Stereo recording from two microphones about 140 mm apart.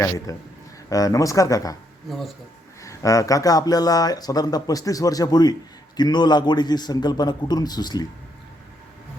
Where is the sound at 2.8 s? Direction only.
25° left (ahead or behind).